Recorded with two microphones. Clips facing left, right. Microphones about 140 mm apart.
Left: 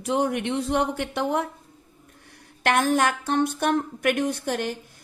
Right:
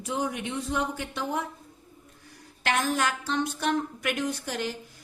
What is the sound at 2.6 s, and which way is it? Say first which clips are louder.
A woman's voice: left 5 dB; 55° left (ahead or behind).